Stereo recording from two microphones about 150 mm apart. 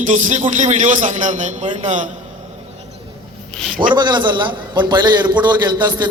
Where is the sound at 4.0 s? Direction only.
30° right (ahead or behind).